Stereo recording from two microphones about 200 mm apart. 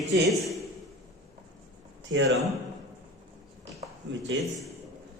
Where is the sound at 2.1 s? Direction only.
65° right (ahead or behind).